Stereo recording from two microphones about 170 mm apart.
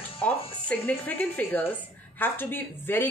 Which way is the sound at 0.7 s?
10° left (ahead or behind).